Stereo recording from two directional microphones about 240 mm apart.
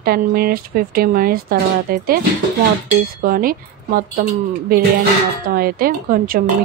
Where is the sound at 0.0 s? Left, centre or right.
Right.